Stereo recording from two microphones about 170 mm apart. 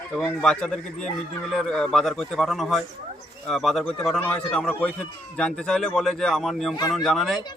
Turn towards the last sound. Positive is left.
turn(degrees=0)  # may be behind; listen again after turning